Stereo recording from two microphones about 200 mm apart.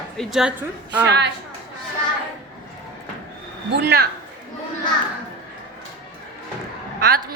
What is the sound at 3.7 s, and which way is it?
Speech, 50° right (ahead or behind).